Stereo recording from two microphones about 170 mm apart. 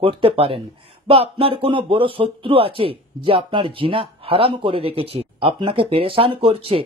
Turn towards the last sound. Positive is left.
turn(degrees=-35)  # may be behind; listen again after turning